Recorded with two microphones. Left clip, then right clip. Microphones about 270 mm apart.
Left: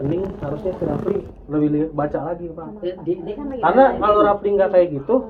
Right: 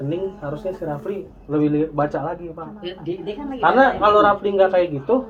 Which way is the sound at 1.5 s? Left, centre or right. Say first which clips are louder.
Right 1 dB; right.